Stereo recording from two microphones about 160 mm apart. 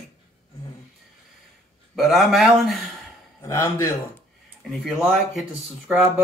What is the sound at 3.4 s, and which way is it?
Speech, 15° left (ahead or behind).